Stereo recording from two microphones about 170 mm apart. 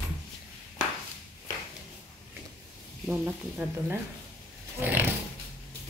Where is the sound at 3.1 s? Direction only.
10° right (ahead or behind).